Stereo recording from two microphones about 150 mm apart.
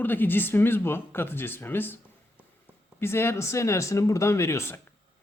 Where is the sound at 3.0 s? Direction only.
15° left (ahead or behind).